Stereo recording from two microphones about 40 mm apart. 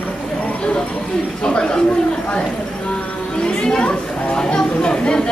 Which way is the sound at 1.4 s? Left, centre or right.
Left.